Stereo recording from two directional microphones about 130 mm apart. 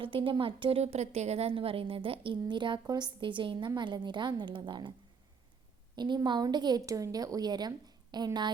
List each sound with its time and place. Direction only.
0.0 s a woman's voice: 45° right (ahead or behind)
6.0 s a woman's voice: 35° right (ahead or behind)